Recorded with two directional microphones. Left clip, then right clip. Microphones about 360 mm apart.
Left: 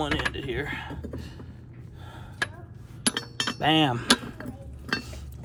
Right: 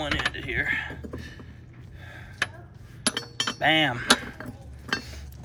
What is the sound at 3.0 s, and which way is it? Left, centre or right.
Chink, centre.